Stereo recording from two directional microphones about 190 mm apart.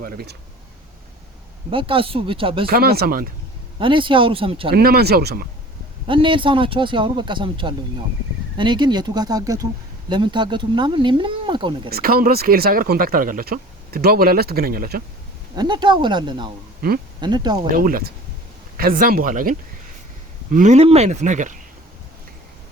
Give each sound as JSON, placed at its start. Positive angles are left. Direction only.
{"t": 0.0, "sound": "speech", "side_deg": -55}
{"t": 1.7, "sound": "speech", "side_deg": -25}
{"t": 2.6, "sound": "speech", "side_deg": -55}
{"t": 3.8, "sound": "speech", "side_deg": -25}
{"t": 4.7, "sound": "speech", "side_deg": -55}
{"t": 6.1, "sound": "speech", "side_deg": -25}
{"t": 11.9, "sound": "speech", "side_deg": -55}
{"t": 15.5, "sound": "speech", "side_deg": -25}
{"t": 17.7, "sound": "speech", "side_deg": -50}